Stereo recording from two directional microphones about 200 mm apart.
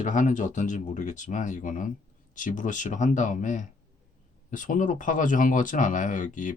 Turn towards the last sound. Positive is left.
turn(degrees=40)  # may be behind; listen again after turning